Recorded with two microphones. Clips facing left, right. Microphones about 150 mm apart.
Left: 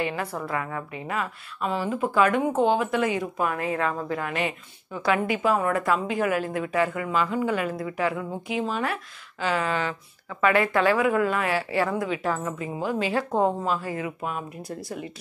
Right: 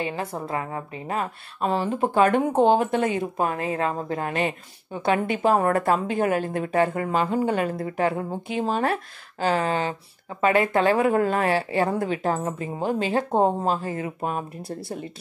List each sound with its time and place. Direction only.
0.0 s a woman's voice: 25° right (ahead or behind)
5.5 s a woman's voice: 45° right (ahead or behind)
5.9 s a woman's voice: 35° right (ahead or behind)
11.1 s a woman's voice: 35° right (ahead or behind)
13.7 s a woman's voice: 40° right (ahead or behind)